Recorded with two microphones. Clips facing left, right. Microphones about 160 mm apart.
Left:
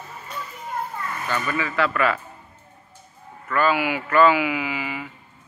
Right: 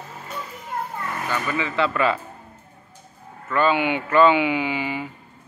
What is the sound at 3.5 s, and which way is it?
Speech, 25° right (ahead or behind).